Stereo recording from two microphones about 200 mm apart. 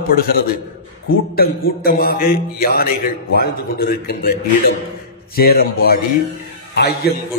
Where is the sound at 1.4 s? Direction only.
50° left (ahead or behind).